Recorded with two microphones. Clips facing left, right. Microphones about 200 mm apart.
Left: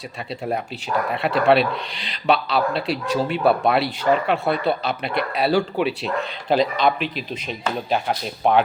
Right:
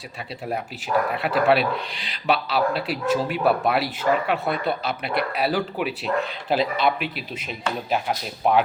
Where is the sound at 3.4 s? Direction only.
30° left (ahead or behind).